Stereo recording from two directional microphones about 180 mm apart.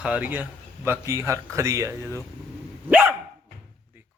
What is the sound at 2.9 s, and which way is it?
Dog, 10° right (ahead or behind).